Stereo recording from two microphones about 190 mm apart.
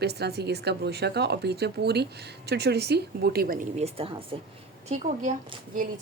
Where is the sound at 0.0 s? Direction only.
60° right (ahead or behind).